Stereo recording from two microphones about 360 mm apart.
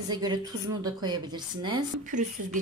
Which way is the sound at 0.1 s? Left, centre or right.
Centre.